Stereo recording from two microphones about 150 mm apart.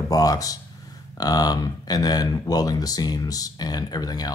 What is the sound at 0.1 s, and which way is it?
Speech, 25° left (ahead or behind).